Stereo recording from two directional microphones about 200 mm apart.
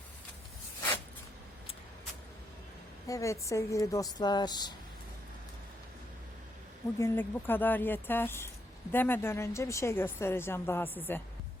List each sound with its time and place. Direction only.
3.1 s a woman's voice: 15° left (ahead or behind)
7.0 s a woman's voice: 10° left (ahead or behind)